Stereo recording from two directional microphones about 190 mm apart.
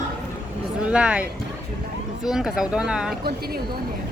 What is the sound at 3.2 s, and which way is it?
Speech, 55° right (ahead or behind).